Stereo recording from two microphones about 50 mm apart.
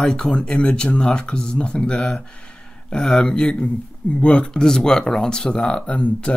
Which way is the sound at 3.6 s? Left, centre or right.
Left.